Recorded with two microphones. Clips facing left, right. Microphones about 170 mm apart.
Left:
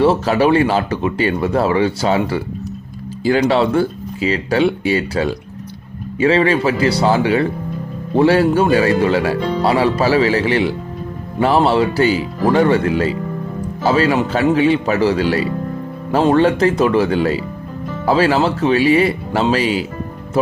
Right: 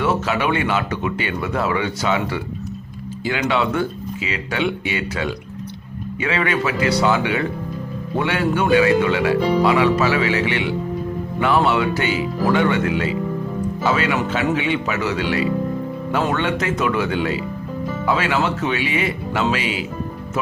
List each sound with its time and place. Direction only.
0.0 s speech: 30° left (ahead or behind)